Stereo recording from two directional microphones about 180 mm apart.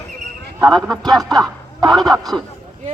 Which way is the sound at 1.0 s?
20° right (ahead or behind).